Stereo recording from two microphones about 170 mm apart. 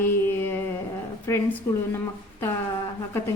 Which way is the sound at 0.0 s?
10° left (ahead or behind).